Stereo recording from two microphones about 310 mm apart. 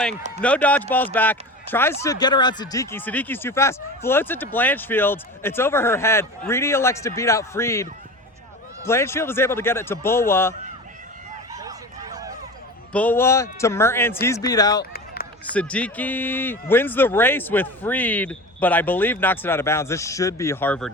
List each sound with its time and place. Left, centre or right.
0.4 s speech: centre
12.1 s a sound: centre
12.9 s speech: centre
14.8 s run: left
15.5 s speech: centre